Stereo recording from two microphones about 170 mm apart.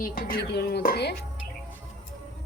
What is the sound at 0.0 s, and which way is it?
Speech, 60° left (ahead or behind).